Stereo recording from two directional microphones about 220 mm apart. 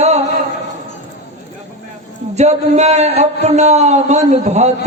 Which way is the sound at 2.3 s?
30° right (ahead or behind).